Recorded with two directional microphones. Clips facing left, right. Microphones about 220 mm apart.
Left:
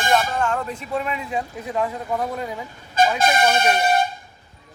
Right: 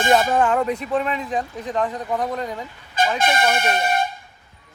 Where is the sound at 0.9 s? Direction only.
10° left (ahead or behind).